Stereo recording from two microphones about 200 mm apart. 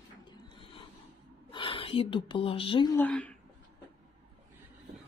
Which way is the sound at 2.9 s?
10° left (ahead or behind).